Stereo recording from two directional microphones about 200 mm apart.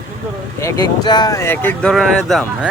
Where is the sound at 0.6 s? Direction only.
20° left (ahead or behind); by 2.6 s 5° left (ahead or behind).